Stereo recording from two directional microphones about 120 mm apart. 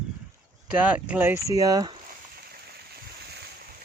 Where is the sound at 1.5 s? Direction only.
30° right (ahead or behind).